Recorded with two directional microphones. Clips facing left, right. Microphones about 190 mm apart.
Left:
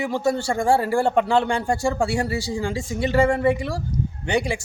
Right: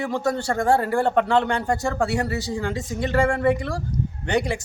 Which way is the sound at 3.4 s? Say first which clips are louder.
Even; 10° left (ahead or behind).